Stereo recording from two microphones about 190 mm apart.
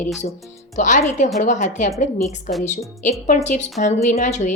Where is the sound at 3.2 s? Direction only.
40° left (ahead or behind).